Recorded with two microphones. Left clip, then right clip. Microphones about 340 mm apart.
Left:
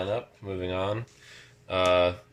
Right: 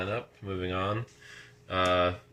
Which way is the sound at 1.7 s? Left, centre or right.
Centre.